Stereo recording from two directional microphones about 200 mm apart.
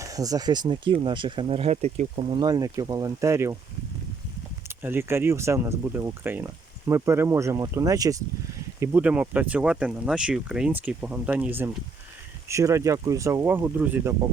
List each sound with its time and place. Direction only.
0.0 s speech: 15° right (ahead or behind)
4.8 s speech: 10° right (ahead or behind)